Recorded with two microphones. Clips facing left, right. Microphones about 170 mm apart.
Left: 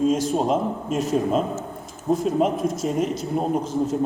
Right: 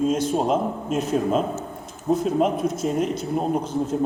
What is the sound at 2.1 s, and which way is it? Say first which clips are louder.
A man's voice: even; centre (ahead or behind).